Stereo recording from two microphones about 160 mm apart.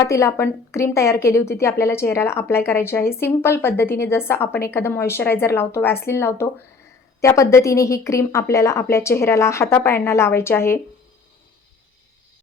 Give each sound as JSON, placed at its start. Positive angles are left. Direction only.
{"t": 0.0, "sound": "a woman's voice", "side_deg": 20}